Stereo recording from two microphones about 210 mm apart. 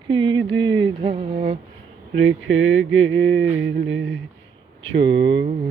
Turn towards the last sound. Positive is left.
turn(degrees=-55)  # may be behind; listen again after turning